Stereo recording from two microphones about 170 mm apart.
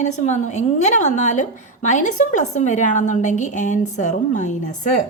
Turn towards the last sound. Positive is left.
turn(degrees=45)  # may be behind; listen again after turning